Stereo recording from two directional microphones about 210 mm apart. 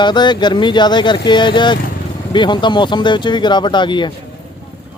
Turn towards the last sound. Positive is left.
turn(degrees=20)  # may be behind; listen again after turning